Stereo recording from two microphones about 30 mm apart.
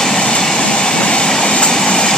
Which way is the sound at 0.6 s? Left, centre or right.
Left.